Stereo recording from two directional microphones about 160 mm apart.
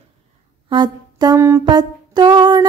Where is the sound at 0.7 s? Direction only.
25° right (ahead or behind).